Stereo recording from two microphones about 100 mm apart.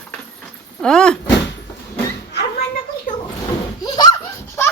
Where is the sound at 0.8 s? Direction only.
5° left (ahead or behind).